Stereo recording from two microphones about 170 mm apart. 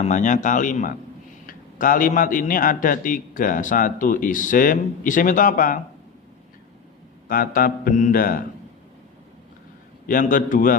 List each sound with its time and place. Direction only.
0.0 s a man's voice: 45° left (ahead or behind)
7.3 s mantra: 55° left (ahead or behind)
10.1 s a man's voice: 50° left (ahead or behind)